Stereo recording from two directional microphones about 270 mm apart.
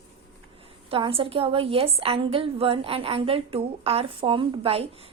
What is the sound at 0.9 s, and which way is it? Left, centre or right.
A woman's voice, centre.